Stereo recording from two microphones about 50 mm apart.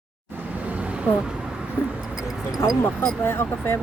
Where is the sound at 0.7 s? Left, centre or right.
Right.